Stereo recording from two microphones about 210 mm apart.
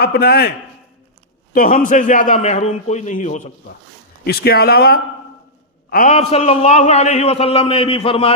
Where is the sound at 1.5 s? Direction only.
40° left (ahead or behind).